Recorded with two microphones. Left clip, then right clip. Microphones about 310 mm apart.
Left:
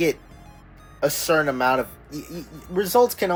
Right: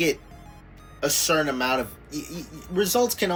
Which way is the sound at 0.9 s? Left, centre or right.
Centre.